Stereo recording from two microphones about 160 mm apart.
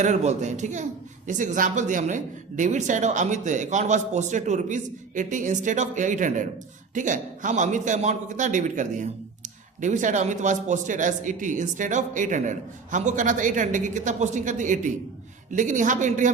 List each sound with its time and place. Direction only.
0.0 s a man's voice: 45° right (ahead or behind)